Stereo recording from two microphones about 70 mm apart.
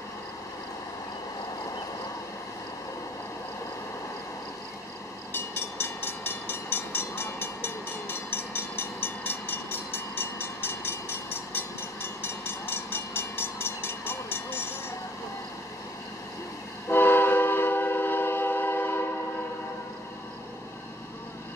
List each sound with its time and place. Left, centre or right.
5.3 s train: left
16.9 s train: left